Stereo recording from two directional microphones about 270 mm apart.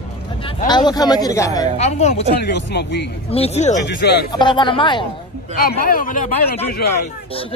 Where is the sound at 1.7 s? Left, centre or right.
Left.